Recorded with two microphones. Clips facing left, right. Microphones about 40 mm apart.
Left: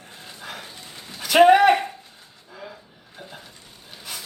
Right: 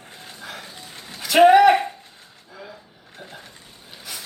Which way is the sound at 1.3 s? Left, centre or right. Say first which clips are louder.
Right 1 dB; centre.